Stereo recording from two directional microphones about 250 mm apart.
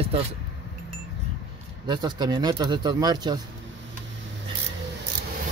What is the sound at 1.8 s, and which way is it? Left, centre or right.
Speech, centre.